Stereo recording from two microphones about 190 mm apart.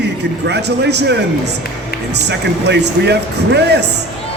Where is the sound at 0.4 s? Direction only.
60° right (ahead or behind).